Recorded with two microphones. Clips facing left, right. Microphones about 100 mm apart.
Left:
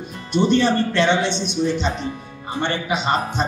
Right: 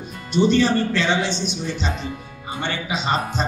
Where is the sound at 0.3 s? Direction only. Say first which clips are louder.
Even; 55° left (ahead or behind).